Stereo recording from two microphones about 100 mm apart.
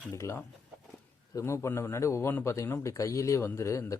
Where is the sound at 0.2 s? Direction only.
25° left (ahead or behind).